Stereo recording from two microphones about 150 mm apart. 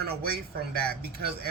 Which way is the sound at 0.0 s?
90° right.